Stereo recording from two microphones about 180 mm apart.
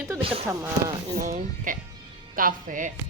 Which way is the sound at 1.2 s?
50° right (ahead or behind).